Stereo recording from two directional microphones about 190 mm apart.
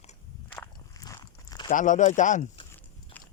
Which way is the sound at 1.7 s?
40° left (ahead or behind).